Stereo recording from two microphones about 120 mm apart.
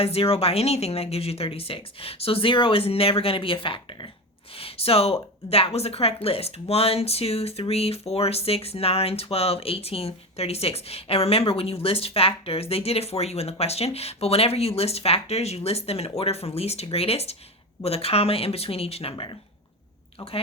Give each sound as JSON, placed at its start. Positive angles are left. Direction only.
{"t": 0.0, "sound": "a woman's voice", "side_deg": 55}